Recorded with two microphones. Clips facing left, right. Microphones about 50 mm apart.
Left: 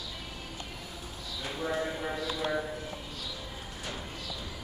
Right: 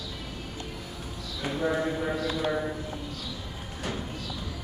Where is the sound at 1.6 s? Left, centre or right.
Right.